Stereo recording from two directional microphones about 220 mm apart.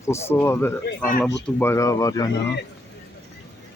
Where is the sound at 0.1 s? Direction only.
10° left (ahead or behind).